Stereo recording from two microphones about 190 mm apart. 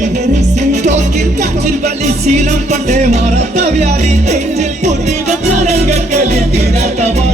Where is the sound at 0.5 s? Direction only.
35° right (ahead or behind).